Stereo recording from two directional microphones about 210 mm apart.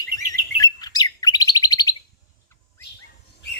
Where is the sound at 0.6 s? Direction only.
20° left (ahead or behind).